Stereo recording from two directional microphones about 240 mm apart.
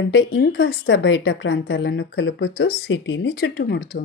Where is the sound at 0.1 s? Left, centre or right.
Left.